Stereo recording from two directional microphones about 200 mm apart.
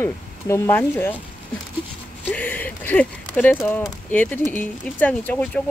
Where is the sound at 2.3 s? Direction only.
10° left (ahead or behind).